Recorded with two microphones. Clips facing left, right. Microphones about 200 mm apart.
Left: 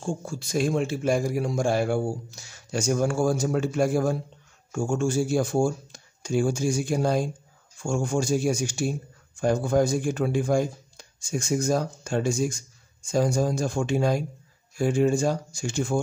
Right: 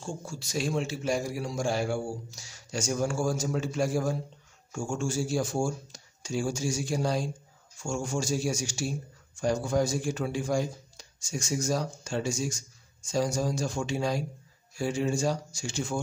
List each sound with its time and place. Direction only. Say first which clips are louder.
0.0 s speech: left 6 dB; 55° left (ahead or behind)